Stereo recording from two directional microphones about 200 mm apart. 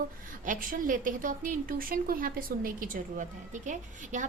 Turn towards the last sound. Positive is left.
turn(degrees=-40)  # may be behind; listen again after turning